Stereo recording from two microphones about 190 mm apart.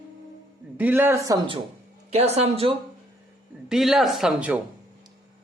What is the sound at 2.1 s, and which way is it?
Speech, 35° right (ahead or behind).